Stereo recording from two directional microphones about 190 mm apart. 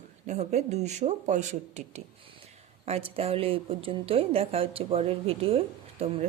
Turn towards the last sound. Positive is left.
turn(degrees=-30)  # may be behind; listen again after turning